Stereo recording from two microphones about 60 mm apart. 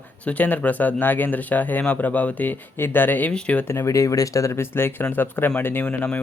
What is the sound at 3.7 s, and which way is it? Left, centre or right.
Speech, left.